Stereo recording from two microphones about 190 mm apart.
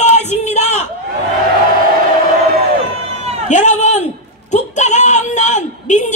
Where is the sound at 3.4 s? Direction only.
40° left (ahead or behind).